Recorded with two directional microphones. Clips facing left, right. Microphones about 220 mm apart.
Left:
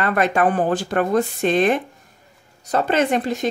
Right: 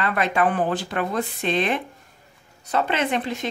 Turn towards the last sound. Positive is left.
turn(degrees=40)  # may be behind; listen again after turning